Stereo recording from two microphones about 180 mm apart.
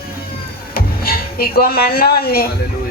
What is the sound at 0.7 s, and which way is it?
Speech, 55° left (ahead or behind).